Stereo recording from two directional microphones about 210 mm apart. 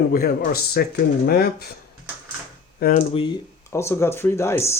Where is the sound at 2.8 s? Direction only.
40° left (ahead or behind).